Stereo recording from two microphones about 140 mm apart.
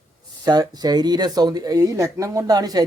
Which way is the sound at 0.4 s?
30° right (ahead or behind).